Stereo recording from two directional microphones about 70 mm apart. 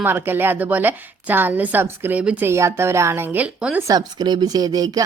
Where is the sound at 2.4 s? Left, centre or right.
Right.